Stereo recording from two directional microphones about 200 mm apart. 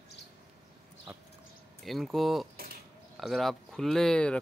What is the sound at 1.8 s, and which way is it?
Speech, centre (ahead or behind).